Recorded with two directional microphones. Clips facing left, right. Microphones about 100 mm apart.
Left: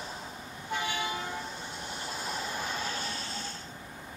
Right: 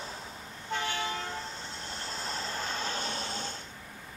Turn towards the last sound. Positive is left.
turn(degrees=-25)  # may be behind; listen again after turning